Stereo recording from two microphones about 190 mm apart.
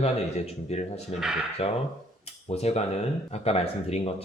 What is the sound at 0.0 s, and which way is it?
Speech, 35° left (ahead or behind).